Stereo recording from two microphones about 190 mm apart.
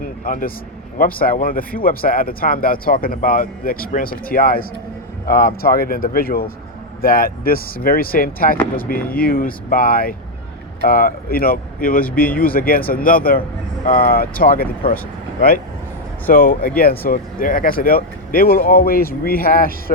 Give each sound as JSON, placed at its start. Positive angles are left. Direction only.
{"t": 0.0, "sound": "vehicle", "side_deg": 50}
{"t": 0.9, "sound": "speech", "side_deg": 50}